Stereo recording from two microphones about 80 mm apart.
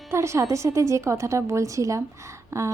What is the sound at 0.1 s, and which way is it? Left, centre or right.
Speech, right.